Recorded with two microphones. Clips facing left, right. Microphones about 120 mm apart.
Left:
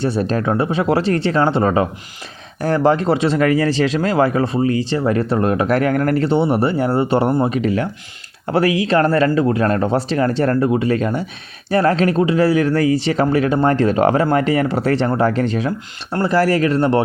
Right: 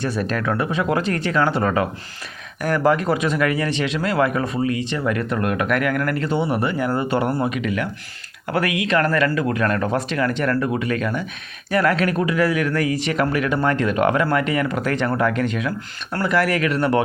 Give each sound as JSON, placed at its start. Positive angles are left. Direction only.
{"t": 0.0, "sound": "speech", "side_deg": 30}